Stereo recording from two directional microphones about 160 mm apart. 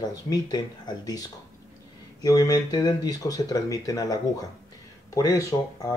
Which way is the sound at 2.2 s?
25° left (ahead or behind).